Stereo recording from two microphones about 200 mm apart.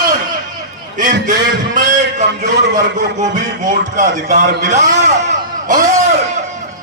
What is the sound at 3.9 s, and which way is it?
A man's voice, 40° right (ahead or behind).